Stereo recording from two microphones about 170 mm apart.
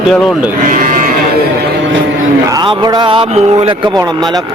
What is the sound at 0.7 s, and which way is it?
Livestock, 55° right (ahead or behind).